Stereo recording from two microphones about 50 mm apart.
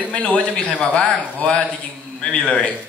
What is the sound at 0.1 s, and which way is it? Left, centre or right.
A man's voice, centre.